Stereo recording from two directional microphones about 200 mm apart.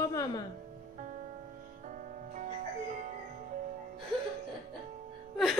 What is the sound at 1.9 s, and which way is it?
Music, 40° right (ahead or behind).